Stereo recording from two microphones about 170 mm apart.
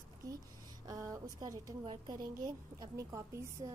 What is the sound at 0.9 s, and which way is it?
A woman's voice, 20° right (ahead or behind).